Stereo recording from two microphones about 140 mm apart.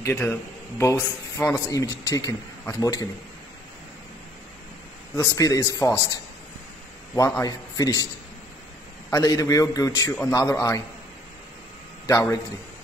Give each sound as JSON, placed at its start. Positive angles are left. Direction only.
{"t": 0.0, "sound": "speech", "side_deg": 15}
{"t": 5.1, "sound": "speech", "side_deg": 25}
{"t": 7.2, "sound": "speech", "side_deg": 20}
{"t": 9.1, "sound": "speech", "side_deg": 25}
{"t": 12.1, "sound": "speech", "side_deg": 20}